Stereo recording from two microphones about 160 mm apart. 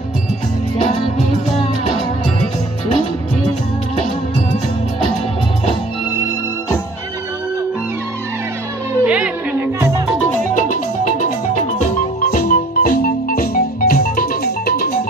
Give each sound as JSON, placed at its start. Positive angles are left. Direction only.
{"t": 9.0, "sound": "music", "side_deg": -10}
{"t": 12.3, "sound": "music", "side_deg": 60}